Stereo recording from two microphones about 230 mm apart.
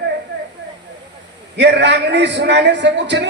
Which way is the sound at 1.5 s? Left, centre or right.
Right.